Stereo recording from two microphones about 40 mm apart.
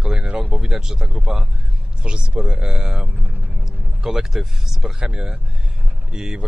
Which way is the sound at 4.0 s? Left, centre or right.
Centre.